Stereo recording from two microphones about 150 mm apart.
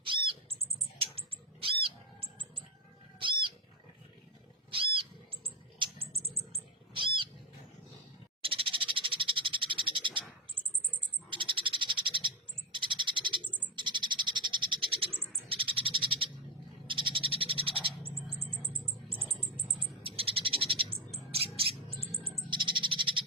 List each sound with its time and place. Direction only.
0.0 s bird flight: 35° right (ahead or behind)
0.6 s rodents: 40° right (ahead or behind)
1.6 s music: 35° right (ahead or behind)
3.2 s a sound: 35° right (ahead or behind)
4.7 s rodents: 35° right (ahead or behind)
6.9 s a sound: 35° right (ahead or behind)
8.4 s frog: 35° right (ahead or behind)
11.3 s frog: 35° right (ahead or behind)
12.7 s bird: 30° right (ahead or behind)
13.7 s frog: 30° right (ahead or behind)
18.7 s a sound: 35° right (ahead or behind)
22.2 s bird: 30° right (ahead or behind)